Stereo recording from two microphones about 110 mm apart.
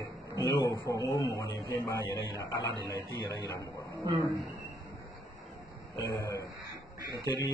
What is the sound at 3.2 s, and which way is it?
Speech, 30° right (ahead or behind).